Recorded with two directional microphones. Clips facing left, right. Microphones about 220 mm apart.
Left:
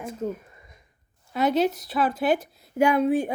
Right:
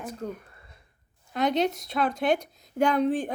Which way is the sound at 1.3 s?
5° left (ahead or behind).